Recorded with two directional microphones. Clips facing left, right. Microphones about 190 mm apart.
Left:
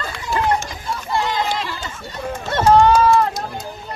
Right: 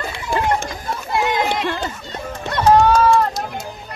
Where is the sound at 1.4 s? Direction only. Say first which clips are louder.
Right 3 dB; 55° right (ahead or behind).